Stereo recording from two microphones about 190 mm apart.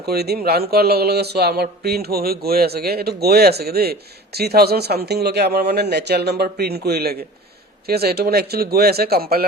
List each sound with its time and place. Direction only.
0.0 s speech: 60° right (ahead or behind)